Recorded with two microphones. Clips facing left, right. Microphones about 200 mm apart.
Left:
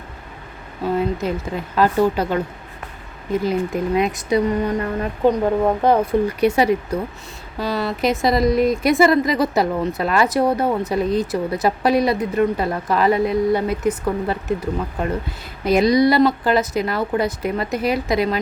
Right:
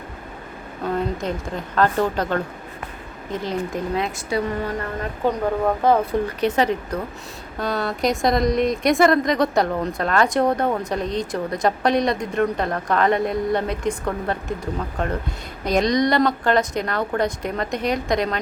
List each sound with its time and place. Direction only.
0.9 s speech: 5° left (ahead or behind)